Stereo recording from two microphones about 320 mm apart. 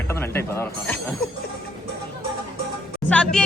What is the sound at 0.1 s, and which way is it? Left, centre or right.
Speech, centre.